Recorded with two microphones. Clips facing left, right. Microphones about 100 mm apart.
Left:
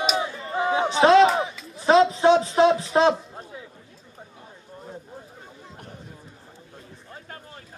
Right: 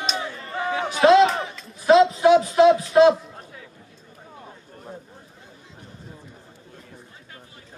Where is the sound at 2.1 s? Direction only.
25° left (ahead or behind).